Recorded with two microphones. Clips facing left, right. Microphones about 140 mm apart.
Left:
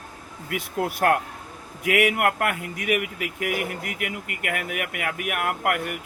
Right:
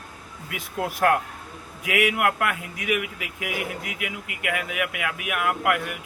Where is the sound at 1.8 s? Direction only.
50° left (ahead or behind).